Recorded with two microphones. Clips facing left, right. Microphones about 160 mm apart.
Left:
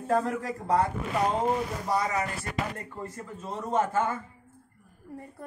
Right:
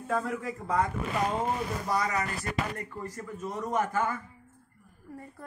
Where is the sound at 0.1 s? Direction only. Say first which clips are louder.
Left 4 dB; 35° left (ahead or behind).